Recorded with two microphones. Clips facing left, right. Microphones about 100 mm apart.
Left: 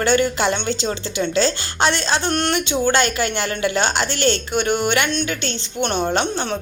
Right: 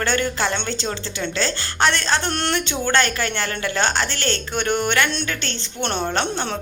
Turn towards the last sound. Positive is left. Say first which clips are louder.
# left 2 dB
turn(degrees=5)  # may be behind; listen again after turning